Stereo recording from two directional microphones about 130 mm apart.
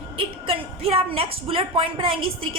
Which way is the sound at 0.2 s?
45° right (ahead or behind).